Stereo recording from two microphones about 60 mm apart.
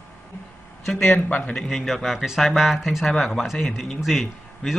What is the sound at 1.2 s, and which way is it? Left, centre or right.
Speech, left.